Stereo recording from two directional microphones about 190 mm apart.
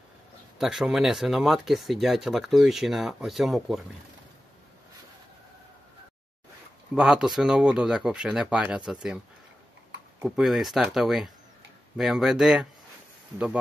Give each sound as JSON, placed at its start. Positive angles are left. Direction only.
{"t": 0.6, "sound": "speech", "side_deg": -5}
{"t": 7.0, "sound": "speech", "side_deg": 0}
{"t": 10.2, "sound": "speech", "side_deg": 0}